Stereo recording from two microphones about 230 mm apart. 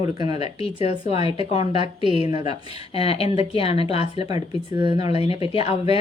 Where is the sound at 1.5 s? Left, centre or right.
Right.